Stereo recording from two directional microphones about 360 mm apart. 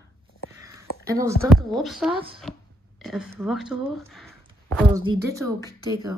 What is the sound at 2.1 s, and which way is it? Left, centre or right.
Speech, centre.